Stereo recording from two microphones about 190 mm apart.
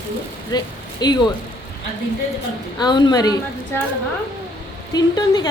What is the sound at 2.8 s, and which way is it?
Speech, 20° left (ahead or behind).